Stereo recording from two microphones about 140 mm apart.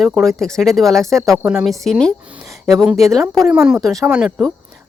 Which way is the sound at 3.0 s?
Centre (ahead or behind).